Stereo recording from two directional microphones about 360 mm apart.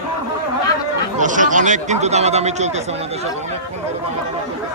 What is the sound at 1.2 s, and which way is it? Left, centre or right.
Speech, right.